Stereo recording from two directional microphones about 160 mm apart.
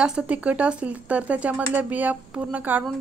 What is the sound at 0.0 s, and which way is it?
A woman's voice, 5° right (ahead or behind).